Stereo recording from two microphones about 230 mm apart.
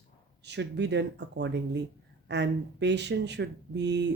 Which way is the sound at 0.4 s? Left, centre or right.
Right.